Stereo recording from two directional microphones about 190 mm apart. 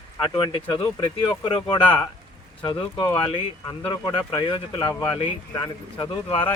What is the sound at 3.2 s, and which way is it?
Speech, 25° left (ahead or behind).